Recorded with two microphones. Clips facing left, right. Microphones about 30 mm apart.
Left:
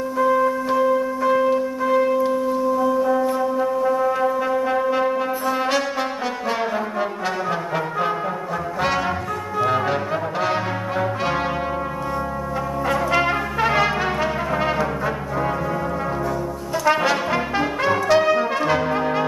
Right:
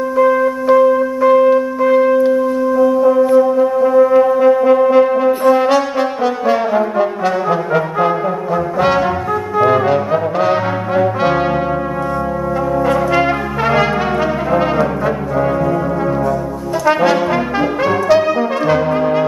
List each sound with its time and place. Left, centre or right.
0.2 s music: centre
3.3 s brass instrument: centre
9.7 s brass instrument: centre
12.8 s brass instrument: centre
16.8 s brass instrument: centre